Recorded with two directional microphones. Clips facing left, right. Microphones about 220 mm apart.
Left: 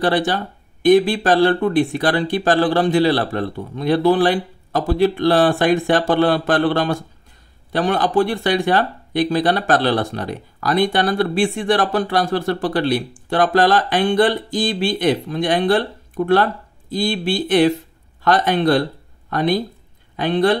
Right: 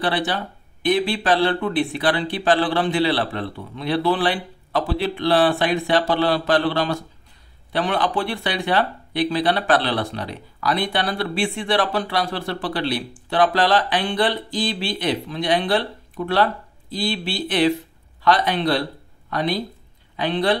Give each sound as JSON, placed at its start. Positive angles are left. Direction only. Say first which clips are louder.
{"t": 0.0, "sound": "speech", "louder": "left 5 dB", "side_deg": 45}